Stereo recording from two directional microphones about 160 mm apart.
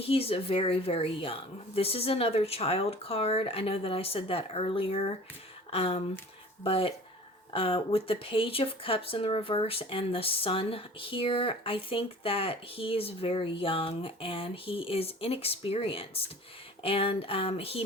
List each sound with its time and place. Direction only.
0.0 s speech: 40° left (ahead or behind)